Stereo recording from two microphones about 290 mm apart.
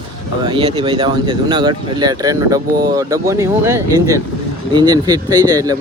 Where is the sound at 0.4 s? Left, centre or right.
Centre.